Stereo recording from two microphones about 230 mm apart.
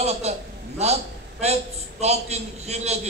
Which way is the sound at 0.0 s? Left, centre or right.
Right.